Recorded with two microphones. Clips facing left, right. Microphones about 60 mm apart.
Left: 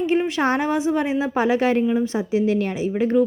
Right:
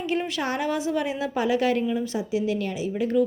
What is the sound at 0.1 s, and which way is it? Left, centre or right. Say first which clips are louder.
A woman's voice: left 5 dB; left.